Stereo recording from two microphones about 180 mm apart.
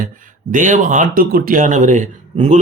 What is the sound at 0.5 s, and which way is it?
Speech, 45° right (ahead or behind).